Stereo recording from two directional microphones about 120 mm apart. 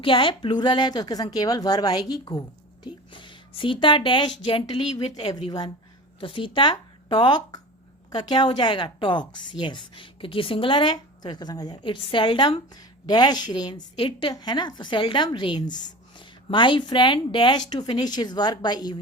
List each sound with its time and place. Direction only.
0.0 s a woman's voice: 45° left (ahead or behind)
11.8 s a woman's voice: 45° left (ahead or behind)